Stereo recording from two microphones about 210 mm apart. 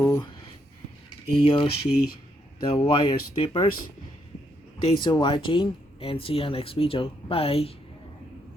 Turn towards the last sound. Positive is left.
turn(degrees=30)  # may be behind; listen again after turning